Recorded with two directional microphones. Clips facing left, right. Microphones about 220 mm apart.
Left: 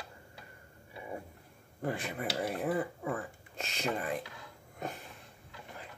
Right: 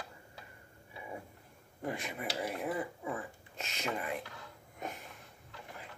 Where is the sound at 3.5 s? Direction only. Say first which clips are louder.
Left 3 dB; 35° left (ahead or behind).